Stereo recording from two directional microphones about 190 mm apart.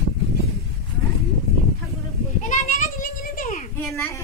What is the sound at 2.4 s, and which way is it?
Children playing, 45° left (ahead or behind).